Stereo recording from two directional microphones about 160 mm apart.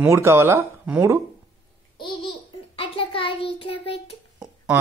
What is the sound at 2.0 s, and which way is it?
Babbling, 30° left (ahead or behind).